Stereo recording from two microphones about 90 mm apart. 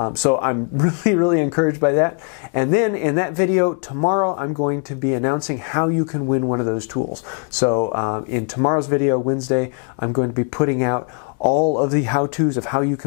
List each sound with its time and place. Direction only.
0.0 s speech: 20° left (ahead or behind)